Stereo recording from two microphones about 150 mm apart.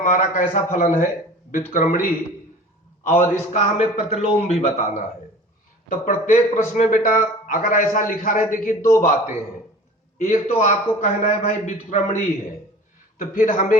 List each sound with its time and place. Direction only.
0.0 s a man's voice: 60° left (ahead or behind)
3.1 s a man's voice: 50° left (ahead or behind)
10.2 s a man's voice: 50° left (ahead or behind)